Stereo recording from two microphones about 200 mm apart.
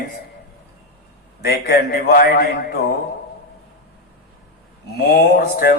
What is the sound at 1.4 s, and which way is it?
A man's voice, 50° left (ahead or behind).